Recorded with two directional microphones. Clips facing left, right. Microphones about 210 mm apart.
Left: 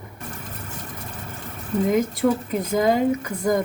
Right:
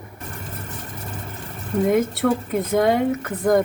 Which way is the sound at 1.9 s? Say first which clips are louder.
Right 1 dB; centre (ahead or behind).